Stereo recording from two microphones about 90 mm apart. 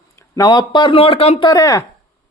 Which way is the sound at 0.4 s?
55° left (ahead or behind).